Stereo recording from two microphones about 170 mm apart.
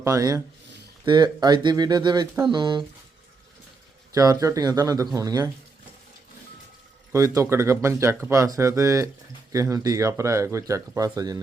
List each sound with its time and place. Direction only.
0.0 s speech: 20° right (ahead or behind)
4.1 s speech: 20° right (ahead or behind)
7.1 s speech: 15° right (ahead or behind)